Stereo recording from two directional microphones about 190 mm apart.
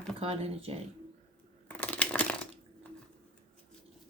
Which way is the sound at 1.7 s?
10° left (ahead or behind).